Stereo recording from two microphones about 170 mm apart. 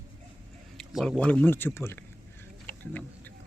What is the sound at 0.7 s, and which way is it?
Speech, centre (ahead or behind).